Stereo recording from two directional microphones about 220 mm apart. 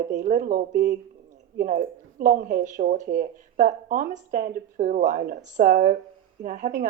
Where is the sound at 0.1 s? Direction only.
35° right (ahead or behind).